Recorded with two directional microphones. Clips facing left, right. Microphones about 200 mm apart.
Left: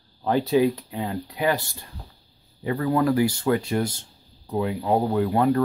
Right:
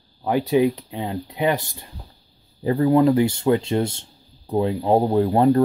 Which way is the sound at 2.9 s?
20° right (ahead or behind).